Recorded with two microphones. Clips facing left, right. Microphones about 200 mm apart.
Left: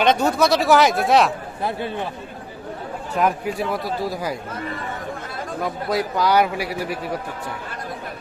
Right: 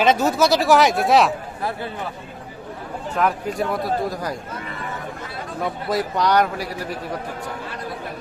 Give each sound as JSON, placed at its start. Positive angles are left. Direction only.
{"t": 0.0, "sound": "speech", "side_deg": 0}
{"t": 3.2, "sound": "a man's voice", "side_deg": 20}
{"t": 3.6, "sound": "speech", "side_deg": 0}
{"t": 5.6, "sound": "speech", "side_deg": 0}